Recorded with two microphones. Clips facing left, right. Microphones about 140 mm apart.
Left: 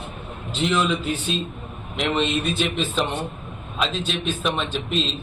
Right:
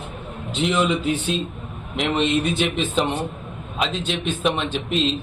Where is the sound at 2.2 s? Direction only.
65° right (ahead or behind).